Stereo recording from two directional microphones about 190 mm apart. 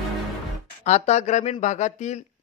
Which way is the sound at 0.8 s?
35° left (ahead or behind).